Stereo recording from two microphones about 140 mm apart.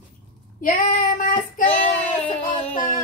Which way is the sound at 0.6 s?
80° left.